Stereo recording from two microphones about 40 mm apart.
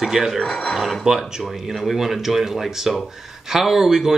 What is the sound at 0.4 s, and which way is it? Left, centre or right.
Speech, left.